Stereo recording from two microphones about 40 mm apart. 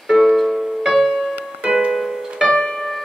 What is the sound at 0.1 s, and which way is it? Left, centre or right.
Music, centre.